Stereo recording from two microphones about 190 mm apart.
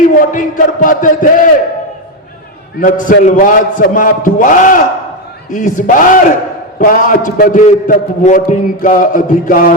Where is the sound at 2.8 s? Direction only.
45° left (ahead or behind).